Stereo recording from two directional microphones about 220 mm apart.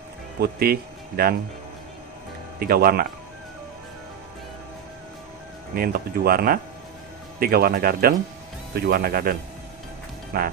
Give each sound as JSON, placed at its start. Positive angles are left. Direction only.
{"t": 0.4, "sound": "speech", "side_deg": -45}
{"t": 2.6, "sound": "speech", "side_deg": -45}
{"t": 5.8, "sound": "speech", "side_deg": -45}